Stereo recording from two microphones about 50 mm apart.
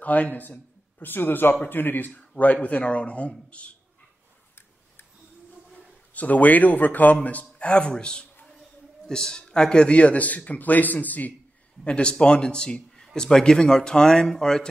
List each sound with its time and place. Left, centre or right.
0.0 s a man's voice: left
6.1 s a man's voice: left
11.8 s a man's voice: left